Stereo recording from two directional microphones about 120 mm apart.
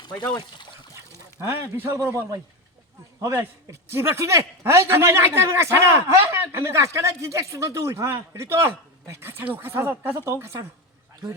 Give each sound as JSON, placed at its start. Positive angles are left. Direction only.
{"t": 0.2, "sound": "speech", "side_deg": 40}
{"t": 0.9, "sound": "a man's voice", "side_deg": -20}